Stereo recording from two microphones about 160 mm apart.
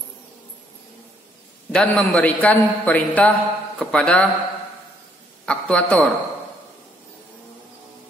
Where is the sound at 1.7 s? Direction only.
5° left (ahead or behind).